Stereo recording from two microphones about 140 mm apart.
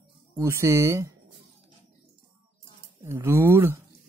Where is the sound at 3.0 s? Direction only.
20° right (ahead or behind).